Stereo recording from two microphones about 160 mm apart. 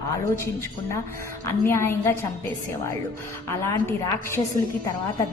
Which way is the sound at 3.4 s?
15° left (ahead or behind).